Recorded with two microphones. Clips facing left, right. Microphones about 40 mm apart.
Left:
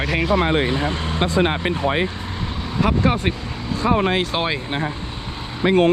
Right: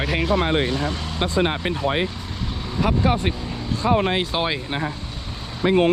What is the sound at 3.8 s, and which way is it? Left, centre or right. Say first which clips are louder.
Speech: left 1 dB; left.